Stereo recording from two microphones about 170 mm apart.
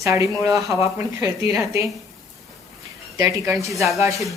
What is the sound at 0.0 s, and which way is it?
Speech, 20° right (ahead or behind).